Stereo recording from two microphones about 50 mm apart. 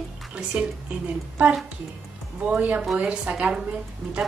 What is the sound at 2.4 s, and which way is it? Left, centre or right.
A woman's voice, right.